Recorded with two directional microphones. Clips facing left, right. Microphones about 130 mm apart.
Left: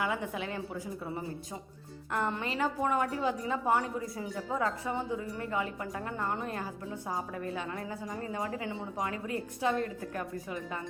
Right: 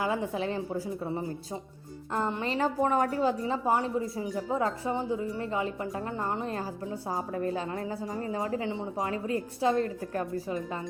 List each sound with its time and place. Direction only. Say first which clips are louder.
0.0 s a woman's voice: right 4 dB; 30° right (ahead or behind)
2.1 s a woman's voice: right 2 dB; 25° right (ahead or behind)
2.5 s a woman's voice: right 6 dB; 35° right (ahead or behind)
3.4 s a woman's voice: right 2 dB; 20° right (ahead or behind)